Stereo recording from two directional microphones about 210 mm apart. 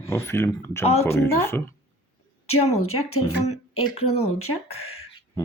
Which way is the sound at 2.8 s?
90° left.